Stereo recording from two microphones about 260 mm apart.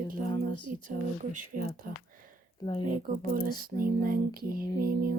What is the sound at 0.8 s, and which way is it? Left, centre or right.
Speech, right.